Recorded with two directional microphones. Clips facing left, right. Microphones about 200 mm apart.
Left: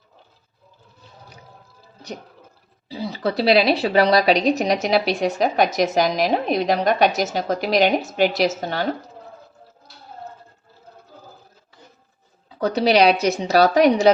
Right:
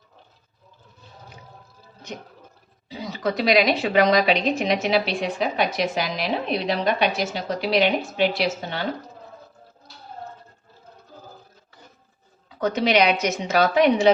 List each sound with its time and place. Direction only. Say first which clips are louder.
2.9 s a woman's voice: left 2 dB; 30° left (ahead or behind)
12.5 s a woman's voice: left 3 dB; 35° left (ahead or behind)